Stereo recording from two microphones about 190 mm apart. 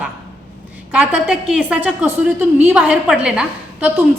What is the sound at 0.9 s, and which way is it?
A woman's voice, 5° right (ahead or behind).